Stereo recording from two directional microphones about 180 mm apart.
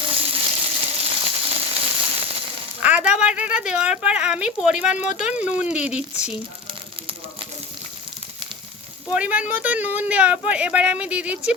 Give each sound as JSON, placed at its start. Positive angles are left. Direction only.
{"t": 0.0, "sound": "frying", "side_deg": -30}
{"t": 2.8, "sound": "speech", "side_deg": -5}
{"t": 9.1, "sound": "speech", "side_deg": -5}